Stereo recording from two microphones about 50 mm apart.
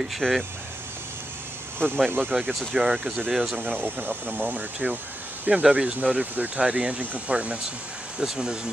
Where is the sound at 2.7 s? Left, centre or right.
Centre.